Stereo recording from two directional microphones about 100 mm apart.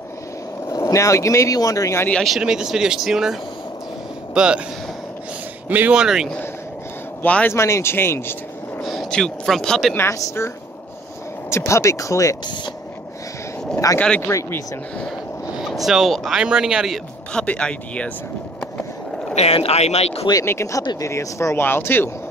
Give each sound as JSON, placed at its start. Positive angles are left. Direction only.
{"t": 0.7, "sound": "speech", "side_deg": 35}
{"t": 2.0, "sound": "speech", "side_deg": 5}
{"t": 5.7, "sound": "speech", "side_deg": -15}
{"t": 7.2, "sound": "speech", "side_deg": 15}
{"t": 7.5, "sound": "speech", "side_deg": 30}
{"t": 8.8, "sound": "speech", "side_deg": 5}
{"t": 9.9, "sound": "speech", "side_deg": 25}
{"t": 11.5, "sound": "speech", "side_deg": 30}
{"t": 13.9, "sound": "speech", "side_deg": 10}
{"t": 14.2, "sound": "speech", "side_deg": 25}
{"t": 15.6, "sound": "speech", "side_deg": 0}
{"t": 17.3, "sound": "speech", "side_deg": 10}
{"t": 19.3, "sound": "speech", "side_deg": 90}
{"t": 20.4, "sound": "speech", "side_deg": 30}